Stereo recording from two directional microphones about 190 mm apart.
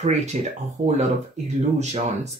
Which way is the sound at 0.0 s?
35° right (ahead or behind).